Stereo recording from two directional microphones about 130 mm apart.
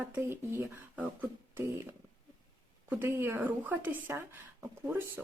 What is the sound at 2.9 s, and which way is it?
A woman's voice, 20° right (ahead or behind).